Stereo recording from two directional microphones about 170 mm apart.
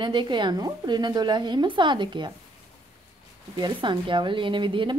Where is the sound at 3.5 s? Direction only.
25° right (ahead or behind).